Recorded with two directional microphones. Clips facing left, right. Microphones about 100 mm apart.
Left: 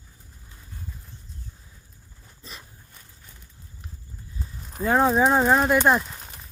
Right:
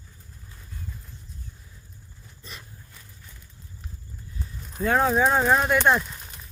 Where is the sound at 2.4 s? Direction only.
35° left (ahead or behind).